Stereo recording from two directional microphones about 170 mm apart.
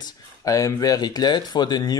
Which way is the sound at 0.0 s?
20° left (ahead or behind).